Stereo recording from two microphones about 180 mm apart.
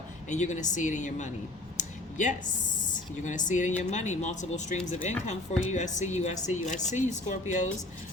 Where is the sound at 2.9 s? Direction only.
45° left (ahead or behind).